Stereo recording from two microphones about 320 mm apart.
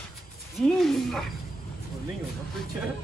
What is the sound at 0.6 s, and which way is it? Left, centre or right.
Speech, centre.